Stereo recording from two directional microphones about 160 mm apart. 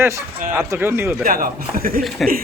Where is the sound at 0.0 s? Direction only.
15° right (ahead or behind).